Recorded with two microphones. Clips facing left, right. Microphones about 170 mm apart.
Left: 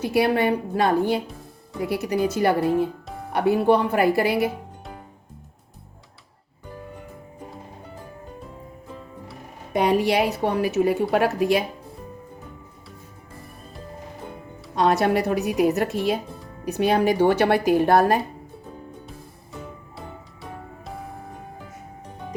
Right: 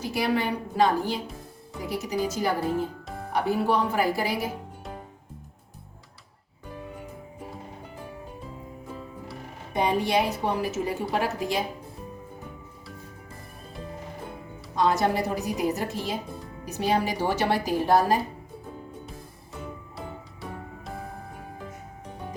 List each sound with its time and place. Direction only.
0.0 s speech: 60° left (ahead or behind)
9.7 s a woman's voice: 70° left (ahead or behind)
14.8 s a woman's voice: 70° left (ahead or behind)
20.0 s music: centre (ahead or behind)